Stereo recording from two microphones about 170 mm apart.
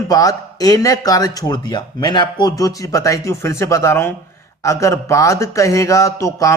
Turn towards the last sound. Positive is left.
turn(degrees=20)  # may be behind; listen again after turning